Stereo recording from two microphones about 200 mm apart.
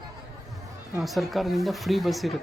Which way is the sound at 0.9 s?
Centre (ahead or behind).